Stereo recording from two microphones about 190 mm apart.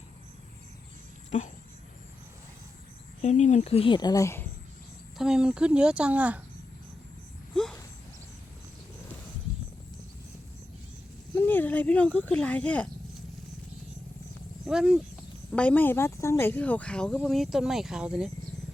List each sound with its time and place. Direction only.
3.2 s speech: 40° left (ahead or behind); by 4.4 s 15° left (ahead or behind)
5.1 s a woman's voice: 5° right (ahead or behind)
7.5 s a sound: centre (ahead or behind)
11.3 s speech: 10° left (ahead or behind)
14.7 s a woman's voice: 5° right (ahead or behind)
15.5 s speech: 10° left (ahead or behind)